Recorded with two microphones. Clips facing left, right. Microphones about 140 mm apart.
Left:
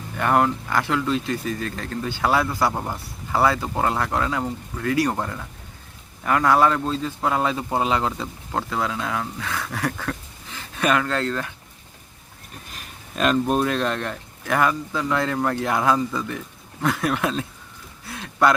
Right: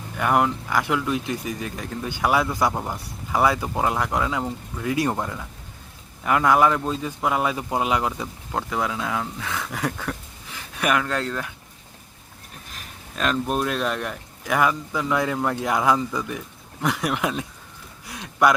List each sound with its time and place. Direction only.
0.2 s a man's voice: 10° right (ahead or behind)
5.1 s a man's voice: 5° right (ahead or behind)
13.1 s a man's voice: centre (ahead or behind); by 17.4 s 15° right (ahead or behind)
18.0 s a sound: 15° right (ahead or behind)